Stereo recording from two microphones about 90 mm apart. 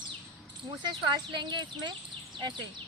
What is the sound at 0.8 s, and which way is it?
Speech, 50° right (ahead or behind).